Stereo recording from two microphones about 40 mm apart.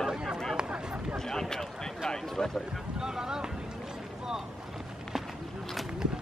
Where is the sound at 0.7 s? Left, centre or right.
Right.